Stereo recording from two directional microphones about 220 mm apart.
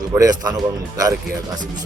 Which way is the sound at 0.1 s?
15° right (ahead or behind).